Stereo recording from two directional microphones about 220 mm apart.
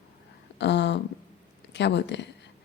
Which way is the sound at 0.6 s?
55° left (ahead or behind).